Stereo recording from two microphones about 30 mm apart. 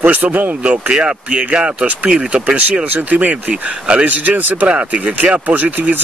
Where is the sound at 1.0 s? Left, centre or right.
Right.